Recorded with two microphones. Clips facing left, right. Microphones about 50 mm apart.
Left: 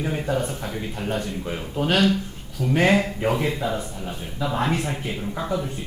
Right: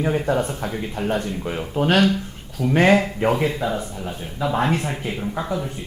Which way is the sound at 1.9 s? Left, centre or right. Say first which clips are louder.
Right 2 dB; right.